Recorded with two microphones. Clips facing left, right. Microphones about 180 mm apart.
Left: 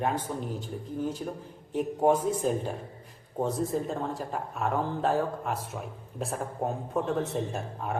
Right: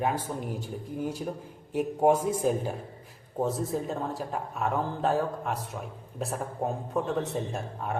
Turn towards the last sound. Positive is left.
turn(degrees=0)  # may be behind; listen again after turning